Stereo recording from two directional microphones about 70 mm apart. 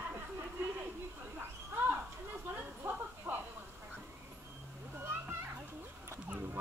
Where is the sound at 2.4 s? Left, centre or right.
Right.